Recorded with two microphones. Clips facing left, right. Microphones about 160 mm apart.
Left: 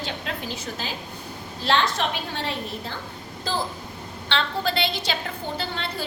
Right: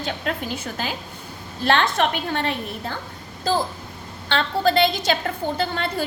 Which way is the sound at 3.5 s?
45° right (ahead or behind).